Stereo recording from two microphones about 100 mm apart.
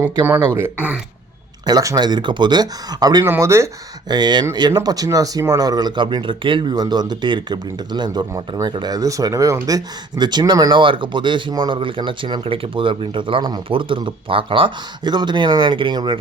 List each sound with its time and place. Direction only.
0.3 s speech: 25° right (ahead or behind)
1.6 s speech: 35° right (ahead or behind)
3.2 s speech: 25° right (ahead or behind)
4.1 s speech: 45° right (ahead or behind); by 14.7 s 65° right (ahead or behind)
15.0 s speech: 45° right (ahead or behind)